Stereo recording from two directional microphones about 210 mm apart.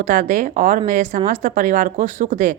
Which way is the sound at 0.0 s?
40° right (ahead or behind).